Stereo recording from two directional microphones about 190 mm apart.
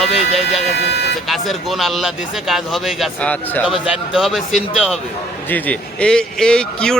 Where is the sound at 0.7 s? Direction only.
60° left (ahead or behind).